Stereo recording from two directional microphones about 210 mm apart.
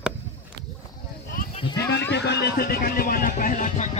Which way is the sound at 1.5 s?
25° left (ahead or behind).